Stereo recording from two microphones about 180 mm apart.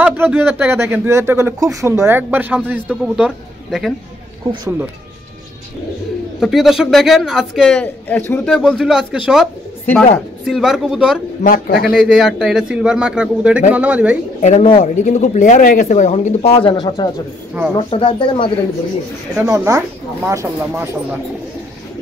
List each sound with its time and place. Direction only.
0.0 s speech: 10° right (ahead or behind)
6.4 s a man's voice: centre (ahead or behind)
11.4 s a man's voice: 50° left (ahead or behind)
11.9 s a man's voice: 5° right (ahead or behind)
14.4 s speech: 40° left (ahead or behind)
19.4 s speech: 15° right (ahead or behind)